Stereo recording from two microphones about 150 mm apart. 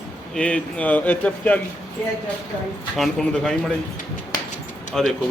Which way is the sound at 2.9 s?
Centre (ahead or behind).